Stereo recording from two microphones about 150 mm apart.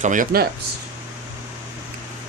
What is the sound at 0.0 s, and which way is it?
Speech, 60° right (ahead or behind).